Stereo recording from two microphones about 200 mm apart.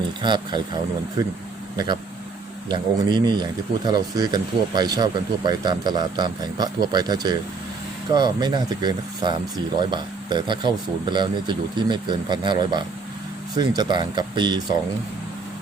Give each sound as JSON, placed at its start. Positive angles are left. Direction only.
{"t": 0.2, "sound": "speech", "side_deg": -20}